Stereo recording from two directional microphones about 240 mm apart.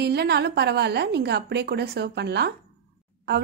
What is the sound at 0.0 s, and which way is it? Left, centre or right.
A woman's voice, right.